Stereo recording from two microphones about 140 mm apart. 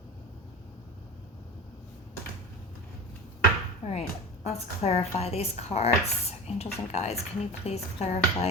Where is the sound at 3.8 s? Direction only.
50° left (ahead or behind).